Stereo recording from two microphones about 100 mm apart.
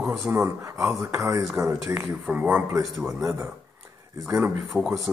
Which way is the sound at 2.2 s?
15° right (ahead or behind).